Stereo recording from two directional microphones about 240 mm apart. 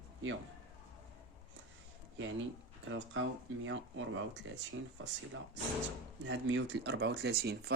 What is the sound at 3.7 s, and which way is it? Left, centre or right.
Speech, right.